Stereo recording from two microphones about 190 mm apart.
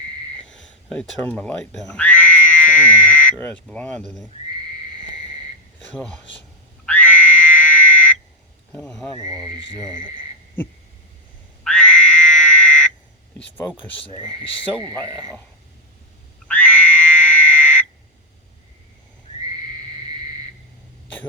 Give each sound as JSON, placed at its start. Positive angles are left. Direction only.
{"t": 0.4, "sound": "speech", "side_deg": 5}
{"t": 5.9, "sound": "speech", "side_deg": 5}
{"t": 6.8, "sound": "frog", "side_deg": 10}
{"t": 8.7, "sound": "speech", "side_deg": 5}
{"t": 9.2, "sound": "speech", "side_deg": -20}
{"t": 9.7, "sound": "cricket", "side_deg": -20}
{"t": 11.6, "sound": "frog", "side_deg": 5}
{"t": 13.6, "sound": "speech", "side_deg": 10}
{"t": 14.1, "sound": "cricket", "side_deg": -20}
{"t": 16.5, "sound": "frog", "side_deg": 5}